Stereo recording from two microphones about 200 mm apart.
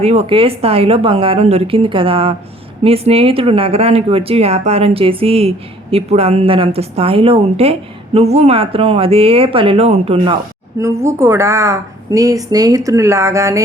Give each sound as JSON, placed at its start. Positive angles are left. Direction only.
{"t": 0.0, "sound": "speech", "side_deg": -30}
{"t": 10.8, "sound": "a woman's voice", "side_deg": -15}